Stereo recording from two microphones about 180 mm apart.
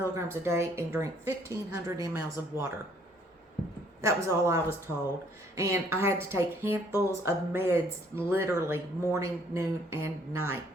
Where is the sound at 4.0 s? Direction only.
15° right (ahead or behind).